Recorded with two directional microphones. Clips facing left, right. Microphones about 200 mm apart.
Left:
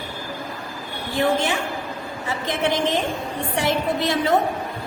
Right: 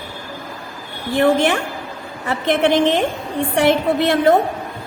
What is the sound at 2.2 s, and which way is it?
A woman's voice, 65° right (ahead or behind).